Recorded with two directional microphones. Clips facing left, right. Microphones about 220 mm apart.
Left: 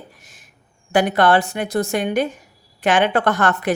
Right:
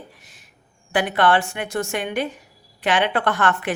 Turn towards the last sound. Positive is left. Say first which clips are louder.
# left 3 dB
turn(degrees=40)  # may be behind; listen again after turning